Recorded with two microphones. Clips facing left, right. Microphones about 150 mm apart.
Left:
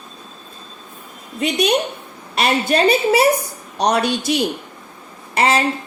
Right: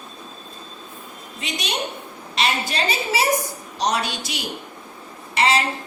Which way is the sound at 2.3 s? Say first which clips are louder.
Left 7 dB; 50° left (ahead or behind).